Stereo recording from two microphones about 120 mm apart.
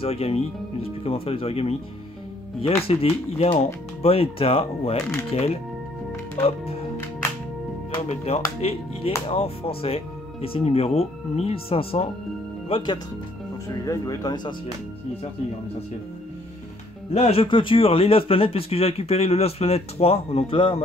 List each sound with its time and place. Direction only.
0.0 s speech: 55° left (ahead or behind)
2.9 s speech: 55° left (ahead or behind)
8.1 s speech: 60° left (ahead or behind); by 13.0 s 45° left (ahead or behind)
13.8 s speech: 30° left (ahead or behind)
17.1 s speech: 60° left (ahead or behind)